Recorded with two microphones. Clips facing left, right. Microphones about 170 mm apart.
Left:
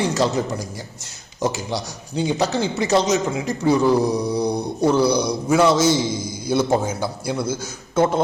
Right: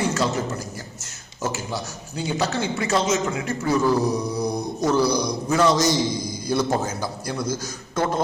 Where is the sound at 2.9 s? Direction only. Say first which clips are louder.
Left 4 dB; 35° left (ahead or behind).